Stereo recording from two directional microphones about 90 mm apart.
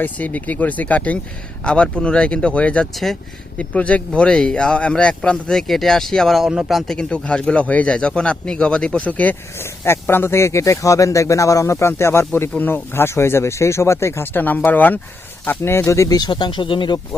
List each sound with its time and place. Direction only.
0.0 s speech: 20° left (ahead or behind)
2.9 s speech: centre (ahead or behind)
3.6 s speech: 15° left (ahead or behind)
9.6 s speech: 25° left (ahead or behind)
16.1 s speech: 50° left (ahead or behind)